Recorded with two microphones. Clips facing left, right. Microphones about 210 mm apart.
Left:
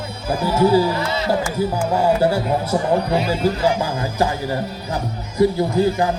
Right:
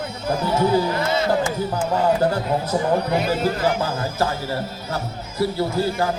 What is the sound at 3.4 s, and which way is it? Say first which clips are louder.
Speech: left 2 dB; 15° left (ahead or behind).